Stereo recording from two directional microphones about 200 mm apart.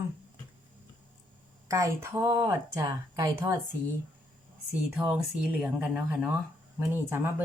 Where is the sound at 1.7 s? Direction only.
15° right (ahead or behind).